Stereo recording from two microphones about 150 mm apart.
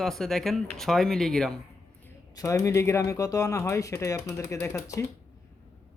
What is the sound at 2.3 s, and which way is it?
Speech, 20° left (ahead or behind).